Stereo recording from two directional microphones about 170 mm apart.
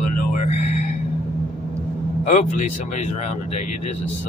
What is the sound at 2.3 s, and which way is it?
Speech, 45° left (ahead or behind).